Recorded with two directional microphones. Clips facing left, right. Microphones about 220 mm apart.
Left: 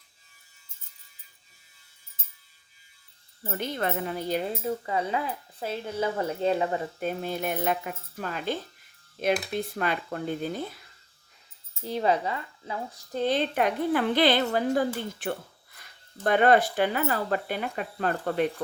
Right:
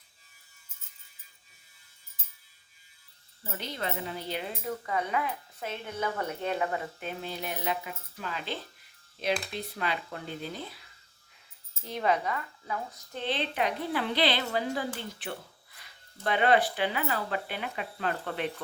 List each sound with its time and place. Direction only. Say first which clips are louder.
3.4 s speech: left 6 dB; 50° left (ahead or behind)
4.9 s speech: left 2 dB; 30° left (ahead or behind)
7.0 s speech: left 7 dB; 45° left (ahead or behind)
11.8 s speech: left 3 dB; 35° left (ahead or behind)